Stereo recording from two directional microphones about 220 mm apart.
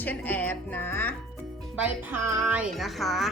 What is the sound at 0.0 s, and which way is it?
Speech, 5° left (ahead or behind).